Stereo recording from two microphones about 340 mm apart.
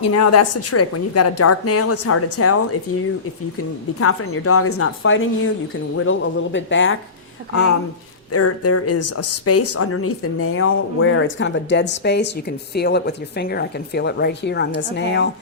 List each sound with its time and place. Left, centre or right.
0.0 s a woman's voice: left
4.0 s a woman's voice: left
8.3 s a woman's voice: left